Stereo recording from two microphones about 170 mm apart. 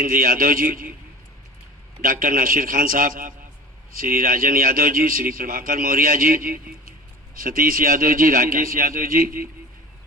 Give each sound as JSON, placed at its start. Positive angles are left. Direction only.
{"t": 0.0, "sound": "a man's voice", "side_deg": -55}
{"t": 2.0, "sound": "a man's voice", "side_deg": -55}